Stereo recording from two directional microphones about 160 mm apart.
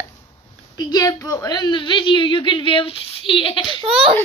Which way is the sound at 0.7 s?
25° left (ahead or behind).